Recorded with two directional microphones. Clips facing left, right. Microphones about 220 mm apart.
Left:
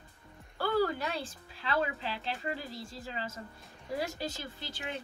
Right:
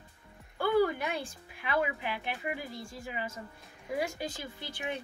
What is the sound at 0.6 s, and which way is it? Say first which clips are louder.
A woman's voice: right 3 dB; 15° right (ahead or behind).